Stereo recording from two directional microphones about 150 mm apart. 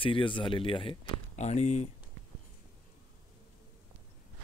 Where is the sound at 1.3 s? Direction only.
50° left (ahead or behind).